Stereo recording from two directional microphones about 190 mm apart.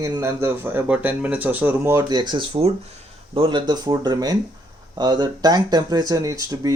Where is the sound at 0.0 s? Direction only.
15° right (ahead or behind).